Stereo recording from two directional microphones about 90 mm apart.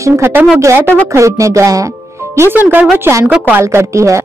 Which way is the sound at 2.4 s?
25° right (ahead or behind).